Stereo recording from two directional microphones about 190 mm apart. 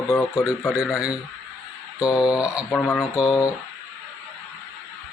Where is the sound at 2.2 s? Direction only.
5° right (ahead or behind).